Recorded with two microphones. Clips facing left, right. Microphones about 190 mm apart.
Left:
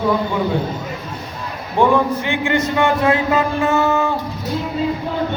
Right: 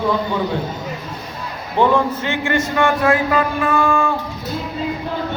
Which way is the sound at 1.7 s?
10° left (ahead or behind).